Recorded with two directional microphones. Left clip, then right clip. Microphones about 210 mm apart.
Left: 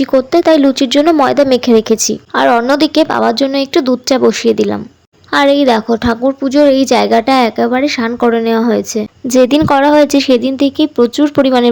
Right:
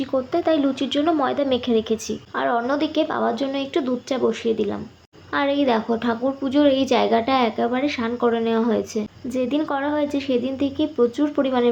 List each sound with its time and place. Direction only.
0.0 s a woman's voice: 45° left (ahead or behind)